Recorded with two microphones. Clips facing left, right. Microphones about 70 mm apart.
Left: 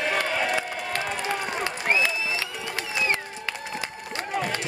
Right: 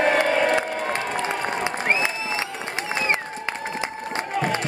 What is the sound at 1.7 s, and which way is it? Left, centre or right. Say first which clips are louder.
Applause: right 1 dB; right.